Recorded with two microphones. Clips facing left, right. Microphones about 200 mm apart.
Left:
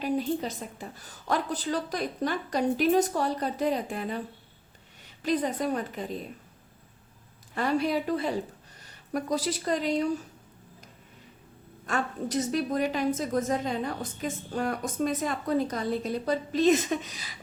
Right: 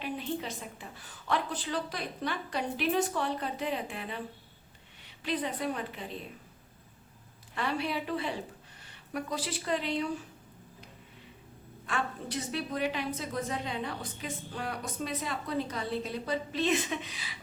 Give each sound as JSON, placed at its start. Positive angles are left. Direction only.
{"t": 0.0, "sound": "a woman's voice", "side_deg": 40}
{"t": 7.5, "sound": "a woman's voice", "side_deg": 40}
{"t": 11.9, "sound": "a woman's voice", "side_deg": 45}